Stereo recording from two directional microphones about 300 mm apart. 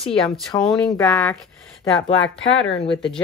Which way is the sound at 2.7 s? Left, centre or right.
Centre.